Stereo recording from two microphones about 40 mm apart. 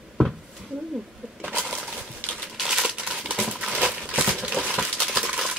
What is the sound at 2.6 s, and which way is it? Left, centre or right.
Crumpling, centre.